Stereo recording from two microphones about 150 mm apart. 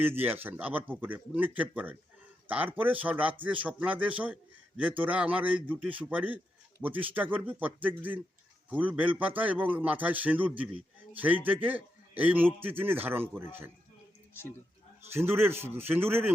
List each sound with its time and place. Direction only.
0.0 s a man's voice: 15° right (ahead or behind)
15.1 s speech: 15° right (ahead or behind)